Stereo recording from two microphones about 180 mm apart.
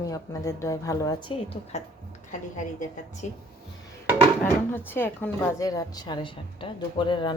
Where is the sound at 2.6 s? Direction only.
45° left (ahead or behind).